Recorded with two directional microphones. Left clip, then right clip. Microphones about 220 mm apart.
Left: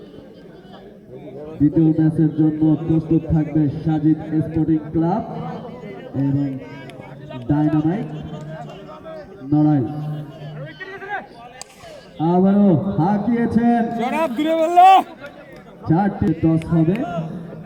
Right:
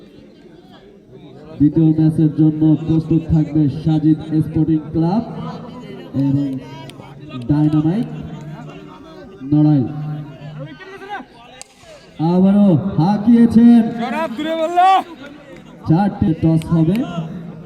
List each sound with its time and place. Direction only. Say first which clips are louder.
1.8 s a man's voice: right 2 dB; 60° right (ahead or behind)
9.0 s a sound: right 2 dB; 50° right (ahead or behind)
12.2 s a man's voice: right 1 dB; 50° right (ahead or behind)
14.0 s speech: left 1 dB; 45° left (ahead or behind)
15.9 s a man's voice: right 2 dB; 55° right (ahead or behind)